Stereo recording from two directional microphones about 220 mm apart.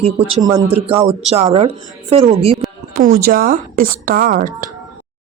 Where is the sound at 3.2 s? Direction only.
40° right (ahead or behind).